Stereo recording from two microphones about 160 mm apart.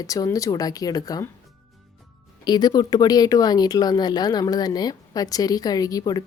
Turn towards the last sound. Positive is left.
turn(degrees=25)  # may be behind; listen again after turning